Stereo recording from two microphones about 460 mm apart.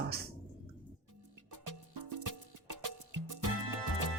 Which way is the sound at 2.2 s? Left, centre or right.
Right.